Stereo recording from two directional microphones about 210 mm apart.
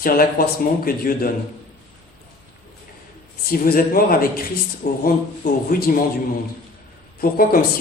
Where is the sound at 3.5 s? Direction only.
45° left (ahead or behind).